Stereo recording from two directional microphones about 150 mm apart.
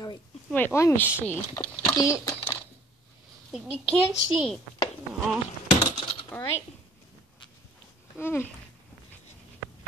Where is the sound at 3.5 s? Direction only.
5° right (ahead or behind).